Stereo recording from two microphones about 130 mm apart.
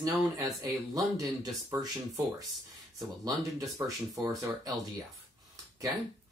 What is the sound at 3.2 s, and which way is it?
Speech, 25° right (ahead or behind).